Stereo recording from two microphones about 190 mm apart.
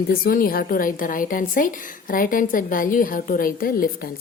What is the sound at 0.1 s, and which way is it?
A woman's voice, 50° left (ahead or behind).